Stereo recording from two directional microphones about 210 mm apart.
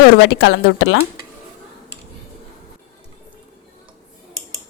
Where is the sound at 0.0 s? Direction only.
60° left (ahead or behind).